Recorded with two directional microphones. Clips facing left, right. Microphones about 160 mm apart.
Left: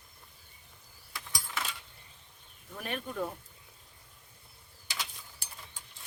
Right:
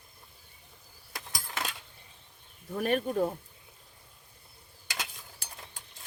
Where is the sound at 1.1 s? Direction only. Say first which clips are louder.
Right 1 dB; 45° right (ahead or behind).